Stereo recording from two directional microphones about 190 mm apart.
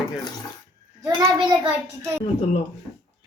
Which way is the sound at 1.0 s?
20° right (ahead or behind).